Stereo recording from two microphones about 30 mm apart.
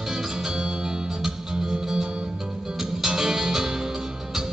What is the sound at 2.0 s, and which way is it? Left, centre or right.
Music, right.